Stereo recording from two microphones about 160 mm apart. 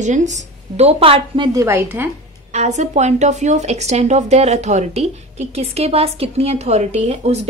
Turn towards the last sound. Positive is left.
turn(degrees=-40)  # may be behind; listen again after turning